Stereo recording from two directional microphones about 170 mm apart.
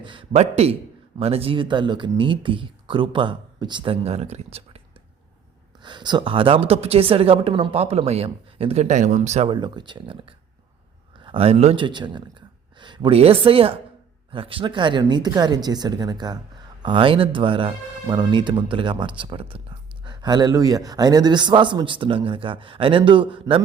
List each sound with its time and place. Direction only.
0.0 s a woman's voice: 30° right (ahead or behind)
5.8 s a woman's voice: 25° right (ahead or behind); by 9.5 s 45° right (ahead or behind)
9.5 s a woman's voice: 25° right (ahead or behind)
11.8 s speech: 25° right (ahead or behind)